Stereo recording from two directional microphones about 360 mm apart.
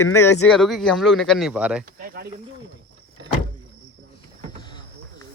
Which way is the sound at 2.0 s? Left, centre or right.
Right.